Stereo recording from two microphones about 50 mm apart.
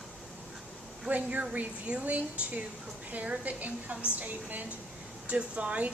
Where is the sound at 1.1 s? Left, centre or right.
Right.